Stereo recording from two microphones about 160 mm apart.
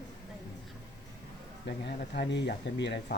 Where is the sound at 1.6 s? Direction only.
90° left.